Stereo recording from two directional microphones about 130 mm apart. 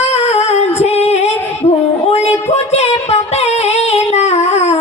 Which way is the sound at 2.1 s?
55° left (ahead or behind).